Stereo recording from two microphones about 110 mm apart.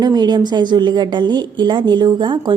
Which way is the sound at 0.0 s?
40° right (ahead or behind).